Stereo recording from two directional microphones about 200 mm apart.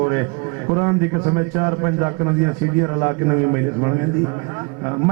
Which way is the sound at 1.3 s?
25° right (ahead or behind).